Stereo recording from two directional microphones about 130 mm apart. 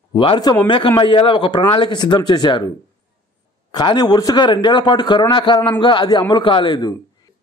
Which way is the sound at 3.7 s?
35° left (ahead or behind).